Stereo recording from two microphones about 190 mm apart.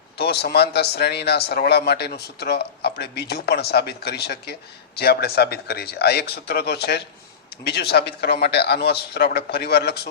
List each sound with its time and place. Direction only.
0.2 s a man's voice: 60° left (ahead or behind)